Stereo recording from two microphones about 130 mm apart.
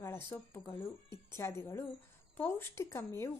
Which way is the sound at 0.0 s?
20° left (ahead or behind).